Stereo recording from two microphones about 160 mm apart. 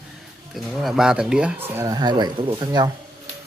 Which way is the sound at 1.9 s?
25° right (ahead or behind).